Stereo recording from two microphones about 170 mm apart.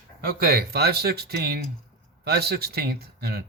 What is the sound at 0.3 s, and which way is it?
Speech, 65° right (ahead or behind).